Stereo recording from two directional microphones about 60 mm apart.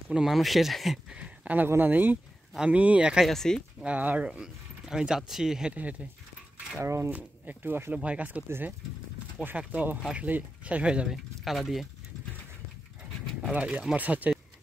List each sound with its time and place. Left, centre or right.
0.1 s speech: centre
1.1 s speech: right
2.6 s speech: right
3.3 s speech: centre
3.8 s speech: right
4.3 s speech: centre
5.8 s speech: right
6.8 s speech: right
7.1 s speech: right
7.9 s speech: right
9.6 s speech: right
11.4 s speech: centre
13.5 s speech: right